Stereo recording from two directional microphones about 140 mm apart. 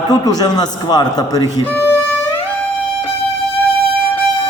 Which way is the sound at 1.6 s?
15° left (ahead or behind).